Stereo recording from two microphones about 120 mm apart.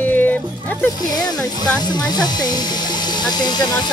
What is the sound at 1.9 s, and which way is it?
Speech, 35° left (ahead or behind).